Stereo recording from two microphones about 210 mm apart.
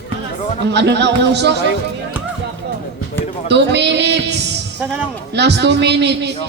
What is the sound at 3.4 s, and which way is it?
Speech, 55° right (ahead or behind).